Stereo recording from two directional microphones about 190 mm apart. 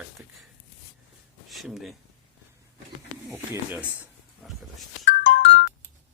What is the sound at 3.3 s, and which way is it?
Speech, 10° right (ahead or behind).